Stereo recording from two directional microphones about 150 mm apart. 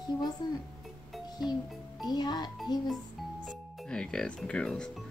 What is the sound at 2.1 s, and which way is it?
Speech, 30° left (ahead or behind).